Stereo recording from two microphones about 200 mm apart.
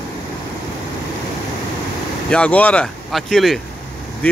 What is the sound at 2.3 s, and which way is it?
Speech, 5° left (ahead or behind).